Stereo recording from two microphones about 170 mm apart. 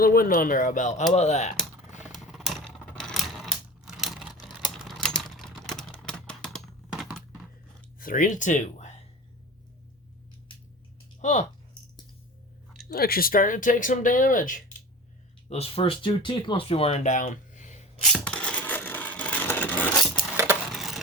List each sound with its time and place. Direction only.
0.0 s speech: 60° left (ahead or behind); by 1.5 s 40° left (ahead or behind)
2.0 s typewriter: centre (ahead or behind)
7.9 s speech: 55° left (ahead or behind)
11.2 s speech: 45° left (ahead or behind)
12.9 s speech: 60° left (ahead or behind)
15.4 s speech: 35° left (ahead or behind)
18.0 s a sound: 5° left (ahead or behind)
20.3 s a sound: 15° right (ahead or behind)
20.7 s a sound: centre (ahead or behind)